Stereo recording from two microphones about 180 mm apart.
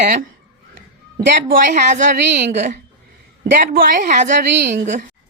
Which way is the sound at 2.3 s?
70° right (ahead or behind).